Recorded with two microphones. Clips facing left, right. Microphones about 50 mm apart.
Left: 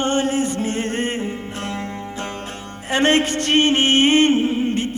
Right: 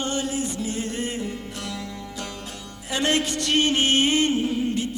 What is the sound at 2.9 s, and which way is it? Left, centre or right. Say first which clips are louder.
Music: left 6 dB; left.